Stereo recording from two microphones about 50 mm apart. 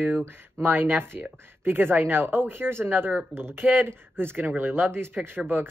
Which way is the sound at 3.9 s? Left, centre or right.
Right.